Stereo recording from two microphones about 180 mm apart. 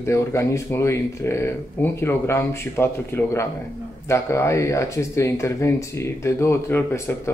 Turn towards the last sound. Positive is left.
turn(degrees=15)  # may be behind; listen again after turning